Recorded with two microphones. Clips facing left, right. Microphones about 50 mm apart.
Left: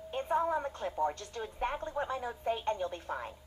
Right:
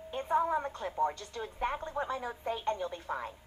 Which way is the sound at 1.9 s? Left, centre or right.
Centre.